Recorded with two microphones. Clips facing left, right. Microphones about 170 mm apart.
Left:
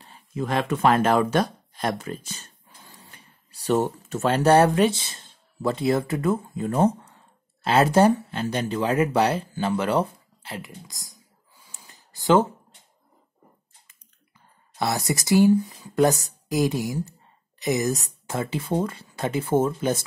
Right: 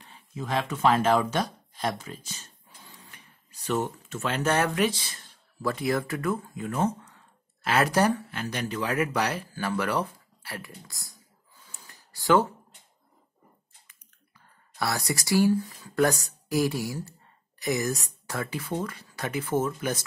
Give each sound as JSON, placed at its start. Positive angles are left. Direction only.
{"t": 0.3, "sound": "speech", "side_deg": 55}
{"t": 3.0, "sound": "speech", "side_deg": 35}
{"t": 14.8, "sound": "speech", "side_deg": 20}